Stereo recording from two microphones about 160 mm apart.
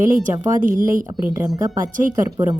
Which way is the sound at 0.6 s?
55° right (ahead or behind).